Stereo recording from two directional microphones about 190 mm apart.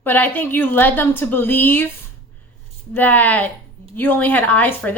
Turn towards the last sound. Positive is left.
turn(degrees=10)  # may be behind; listen again after turning